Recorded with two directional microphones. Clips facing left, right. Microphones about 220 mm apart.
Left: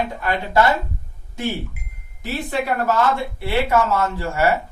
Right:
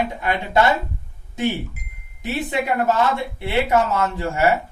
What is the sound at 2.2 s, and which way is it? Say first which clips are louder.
A man's voice: right 1 dB; 20° right (ahead or behind).